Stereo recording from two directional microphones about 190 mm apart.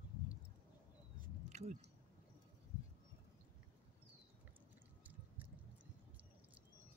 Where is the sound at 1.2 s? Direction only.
35° right (ahead or behind).